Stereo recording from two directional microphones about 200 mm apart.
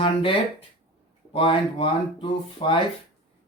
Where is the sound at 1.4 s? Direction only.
25° left (ahead or behind).